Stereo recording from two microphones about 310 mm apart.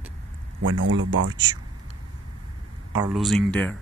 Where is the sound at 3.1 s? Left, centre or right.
Centre.